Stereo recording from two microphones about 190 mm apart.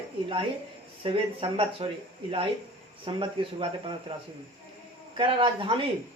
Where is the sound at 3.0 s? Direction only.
25° right (ahead or behind).